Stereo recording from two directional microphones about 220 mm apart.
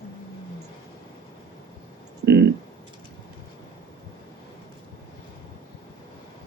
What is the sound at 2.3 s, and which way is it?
Clicking, 50° right (ahead or behind).